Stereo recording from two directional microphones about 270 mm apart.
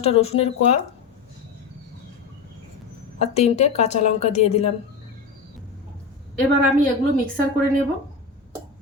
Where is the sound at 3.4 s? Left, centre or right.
Left.